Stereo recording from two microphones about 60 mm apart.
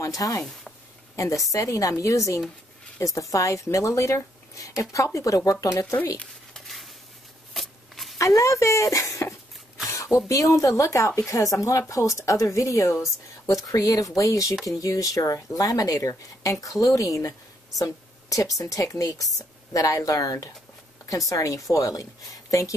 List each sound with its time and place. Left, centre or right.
0.0 s a woman's voice: left
6.5 s a sound: centre
7.5 s shuffling cards: centre
8.2 s a woman's voice: left
14.5 s speech: centre
14.8 s a woman's voice: left